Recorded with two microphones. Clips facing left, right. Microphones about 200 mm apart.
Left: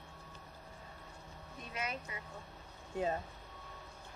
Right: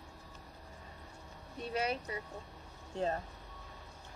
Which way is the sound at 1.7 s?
35° right (ahead or behind).